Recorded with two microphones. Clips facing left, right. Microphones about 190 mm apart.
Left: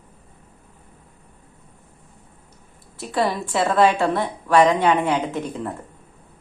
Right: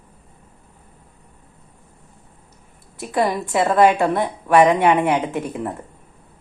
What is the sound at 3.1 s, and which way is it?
A woman's voice, 15° right (ahead or behind).